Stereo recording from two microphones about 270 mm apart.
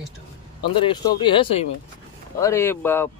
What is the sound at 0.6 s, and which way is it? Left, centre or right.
Speech, centre.